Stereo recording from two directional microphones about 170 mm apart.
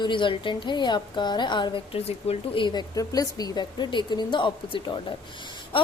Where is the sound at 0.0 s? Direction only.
30° left (ahead or behind).